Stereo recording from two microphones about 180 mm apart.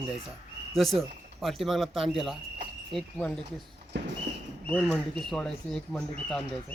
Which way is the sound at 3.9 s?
80° right.